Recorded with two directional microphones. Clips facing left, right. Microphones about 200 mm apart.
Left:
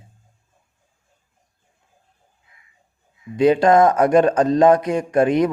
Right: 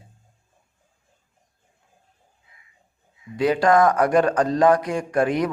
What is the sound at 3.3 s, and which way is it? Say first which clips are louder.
A man's voice: left 4 dB; 20° left (ahead or behind).